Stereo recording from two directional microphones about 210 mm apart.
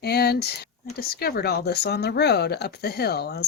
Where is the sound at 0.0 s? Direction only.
50° left (ahead or behind).